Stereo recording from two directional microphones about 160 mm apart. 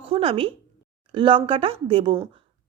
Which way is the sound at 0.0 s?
35° right (ahead or behind).